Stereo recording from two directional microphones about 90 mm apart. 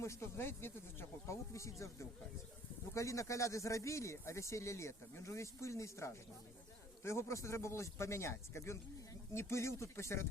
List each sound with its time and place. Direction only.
0.0 s speech: 30° left (ahead or behind)